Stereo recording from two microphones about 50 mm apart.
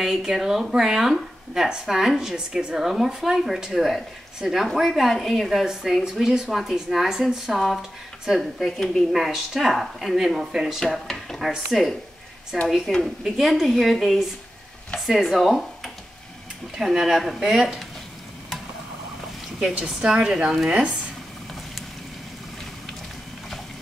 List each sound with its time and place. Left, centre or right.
0.0 s speech: centre
10.8 s speech: centre
19.6 s speech: centre